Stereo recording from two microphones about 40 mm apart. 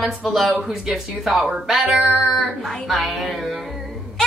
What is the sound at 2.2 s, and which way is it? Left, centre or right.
A woman's voice, centre.